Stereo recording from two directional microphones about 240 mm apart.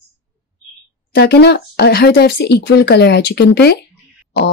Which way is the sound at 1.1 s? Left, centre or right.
Left.